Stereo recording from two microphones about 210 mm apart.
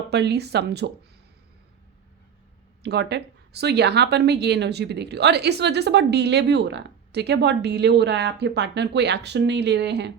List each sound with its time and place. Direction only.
0.1 s speech: 50° right (ahead or behind)
2.8 s speech: 55° right (ahead or behind)